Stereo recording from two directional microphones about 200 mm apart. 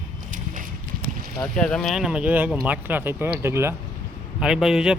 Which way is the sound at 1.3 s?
5° left (ahead or behind).